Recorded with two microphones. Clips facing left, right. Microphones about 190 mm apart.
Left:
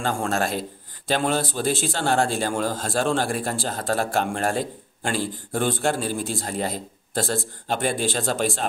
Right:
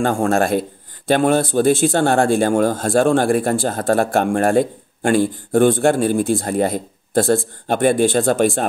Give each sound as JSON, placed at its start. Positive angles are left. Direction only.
{"t": 0.0, "sound": "speech", "side_deg": -50}